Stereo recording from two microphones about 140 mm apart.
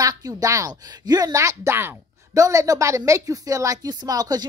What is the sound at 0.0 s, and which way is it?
Speech, 25° right (ahead or behind).